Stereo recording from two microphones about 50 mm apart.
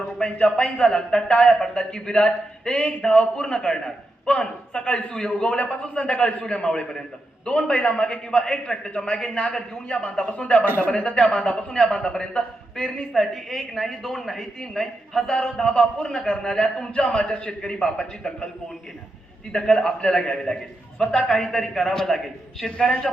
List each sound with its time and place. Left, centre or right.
0.2 s a man's voice: centre
10.2 s a man's voice: left
19.5 s a man's voice: centre